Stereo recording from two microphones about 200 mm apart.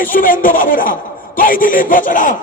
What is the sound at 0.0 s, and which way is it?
A man's voice, 45° left (ahead or behind).